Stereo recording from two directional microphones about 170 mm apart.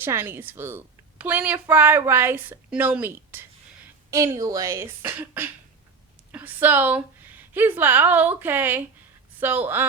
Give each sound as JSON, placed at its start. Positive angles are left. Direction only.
{"t": 0.0, "sound": "a woman's voice", "side_deg": -15}